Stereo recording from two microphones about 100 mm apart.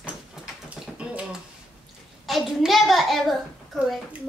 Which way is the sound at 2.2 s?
Centre (ahead or behind).